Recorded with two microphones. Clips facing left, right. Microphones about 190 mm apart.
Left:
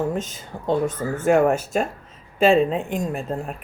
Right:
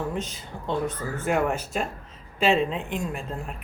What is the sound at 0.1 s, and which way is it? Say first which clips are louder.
Speech: left 4 dB; 45° left (ahead or behind).